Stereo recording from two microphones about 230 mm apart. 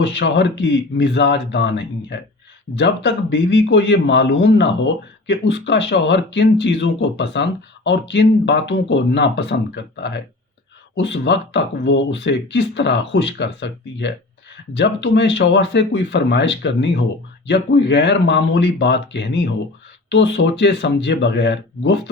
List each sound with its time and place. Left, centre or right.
0.0 s a man's voice: left